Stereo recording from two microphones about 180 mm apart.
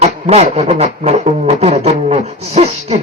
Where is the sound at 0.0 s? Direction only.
35° right (ahead or behind).